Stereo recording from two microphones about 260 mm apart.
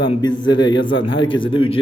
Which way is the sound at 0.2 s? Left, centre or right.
Centre.